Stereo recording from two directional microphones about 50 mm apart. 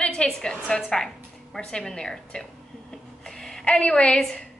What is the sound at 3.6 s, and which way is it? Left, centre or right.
Speech, left.